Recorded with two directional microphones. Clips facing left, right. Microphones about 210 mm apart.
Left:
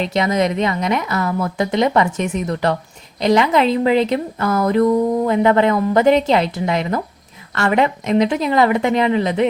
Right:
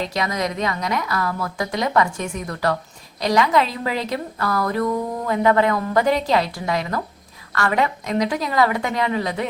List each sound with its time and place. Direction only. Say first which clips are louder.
0.0 s speech: left 6 dB; 25° left (ahead or behind)